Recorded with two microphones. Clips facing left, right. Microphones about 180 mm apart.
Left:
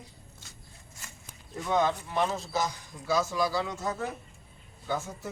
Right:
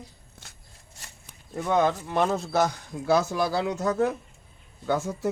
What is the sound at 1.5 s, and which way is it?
Speech, 55° right (ahead or behind).